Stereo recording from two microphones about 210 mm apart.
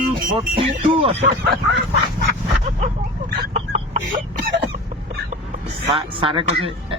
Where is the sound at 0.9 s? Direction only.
25° right (ahead or behind).